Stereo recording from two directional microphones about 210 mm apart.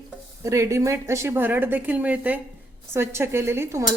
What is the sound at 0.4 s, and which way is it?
Speech, 15° right (ahead or behind).